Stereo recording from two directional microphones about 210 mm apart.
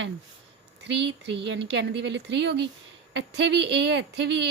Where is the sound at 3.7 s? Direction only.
55° right (ahead or behind).